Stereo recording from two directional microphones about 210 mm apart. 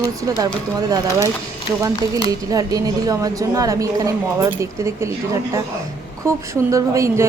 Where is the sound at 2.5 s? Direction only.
15° right (ahead or behind).